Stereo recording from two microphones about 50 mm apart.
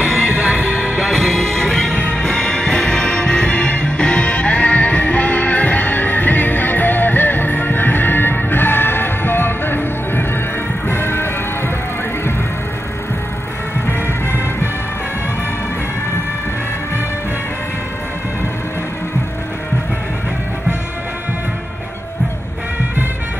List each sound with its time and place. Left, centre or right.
0.9 s music: centre; by 11.7 s left
13.8 s music: left